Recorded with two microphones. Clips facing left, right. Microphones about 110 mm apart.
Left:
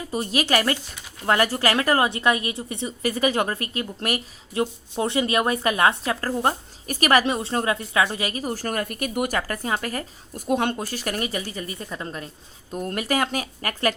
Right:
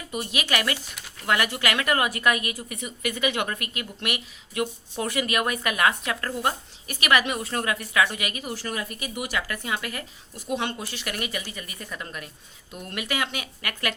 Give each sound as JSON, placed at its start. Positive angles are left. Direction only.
{"t": 0.1, "sound": "a woman's voice", "side_deg": 35}